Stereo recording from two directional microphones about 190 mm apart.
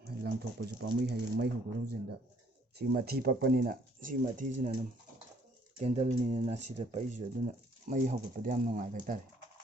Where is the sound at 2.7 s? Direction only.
55° right (ahead or behind).